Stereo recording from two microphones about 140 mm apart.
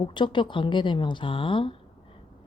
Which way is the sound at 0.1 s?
35° left (ahead or behind).